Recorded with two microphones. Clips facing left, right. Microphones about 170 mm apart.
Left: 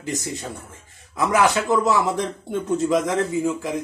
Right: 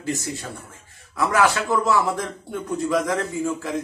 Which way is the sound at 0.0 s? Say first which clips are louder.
Even; 20° left (ahead or behind).